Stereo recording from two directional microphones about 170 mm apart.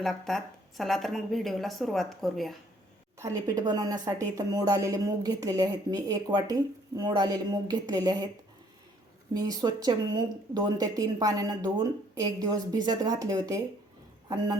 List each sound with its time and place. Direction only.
0.0 s speech: centre (ahead or behind)
3.2 s a woman's voice: 20° right (ahead or behind)
9.3 s a woman's voice: 20° right (ahead or behind)